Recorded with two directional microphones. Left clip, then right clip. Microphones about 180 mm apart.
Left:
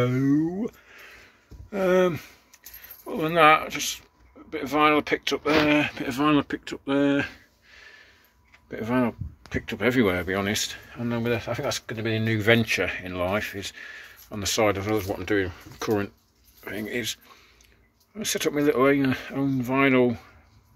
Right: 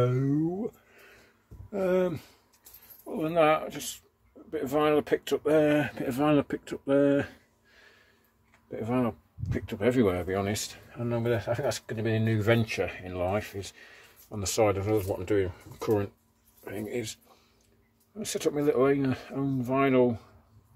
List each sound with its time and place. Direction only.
0.0 s a sound: centre (ahead or behind)
1.7 s speech: 5° left (ahead or behind)
3.6 s speech: 30° right (ahead or behind)
8.6 s speech: 5° left (ahead or behind)